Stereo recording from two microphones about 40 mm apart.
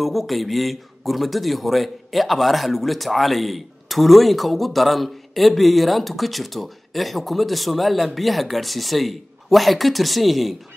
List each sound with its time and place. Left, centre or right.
0.0 s speech: centre